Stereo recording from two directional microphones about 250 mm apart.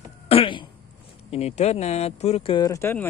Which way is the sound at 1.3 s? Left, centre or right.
Left.